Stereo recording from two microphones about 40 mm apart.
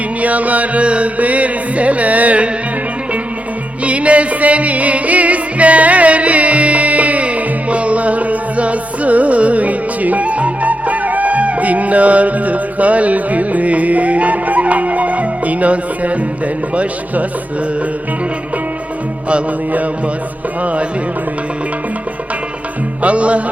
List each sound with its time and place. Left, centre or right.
0.2 s music: right
3.8 s music: right
23.0 s music: right